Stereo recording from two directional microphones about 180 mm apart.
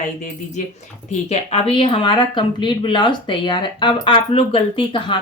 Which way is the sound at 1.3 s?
35° left (ahead or behind).